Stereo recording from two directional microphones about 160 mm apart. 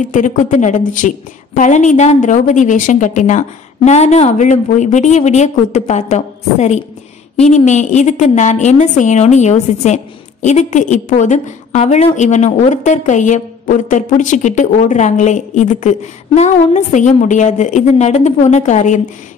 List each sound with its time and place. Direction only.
0.1 s a woman's voice: 55° left (ahead or behind)